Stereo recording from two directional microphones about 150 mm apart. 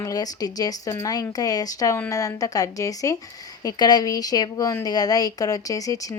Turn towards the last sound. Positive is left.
turn(degrees=25)  # may be behind; listen again after turning